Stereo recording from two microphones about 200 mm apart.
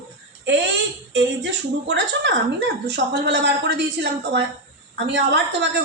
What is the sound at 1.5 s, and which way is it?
A woman's voice, 65° right (ahead or behind).